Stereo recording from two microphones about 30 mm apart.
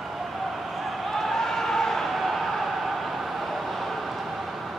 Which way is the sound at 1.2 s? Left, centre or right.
Centre.